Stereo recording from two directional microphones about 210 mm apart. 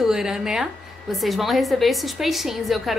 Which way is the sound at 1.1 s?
Centre (ahead or behind).